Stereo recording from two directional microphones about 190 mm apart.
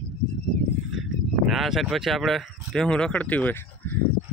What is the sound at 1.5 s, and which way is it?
Speech, centre (ahead or behind).